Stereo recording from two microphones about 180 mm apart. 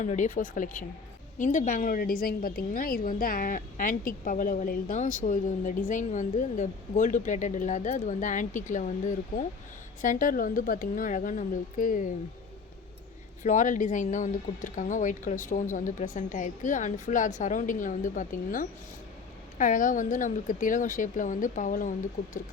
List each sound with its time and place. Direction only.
0.0 s a woman's voice: 40° left (ahead or behind)
13.4 s a woman's voice: 45° left (ahead or behind)